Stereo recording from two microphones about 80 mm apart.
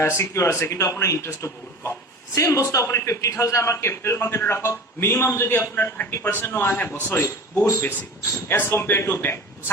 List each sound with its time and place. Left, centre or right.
0.0 s a man's voice: left